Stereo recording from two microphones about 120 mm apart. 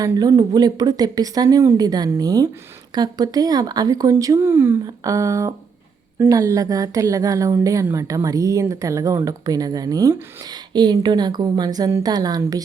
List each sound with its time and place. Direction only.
0.0 s a woman's voice: 30° right (ahead or behind)